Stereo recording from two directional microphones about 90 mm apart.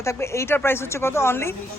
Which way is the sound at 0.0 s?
30° left (ahead or behind).